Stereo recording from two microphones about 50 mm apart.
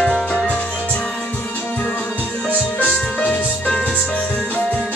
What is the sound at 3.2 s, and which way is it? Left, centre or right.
Music, left.